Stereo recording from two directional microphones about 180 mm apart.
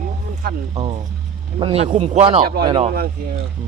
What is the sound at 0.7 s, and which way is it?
Speech, 30° right (ahead or behind).